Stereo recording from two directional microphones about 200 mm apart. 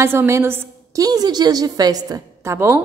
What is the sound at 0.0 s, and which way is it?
A woman's voice, 15° right (ahead or behind).